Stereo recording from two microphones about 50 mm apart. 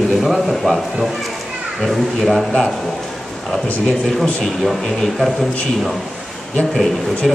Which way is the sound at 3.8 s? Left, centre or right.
Centre.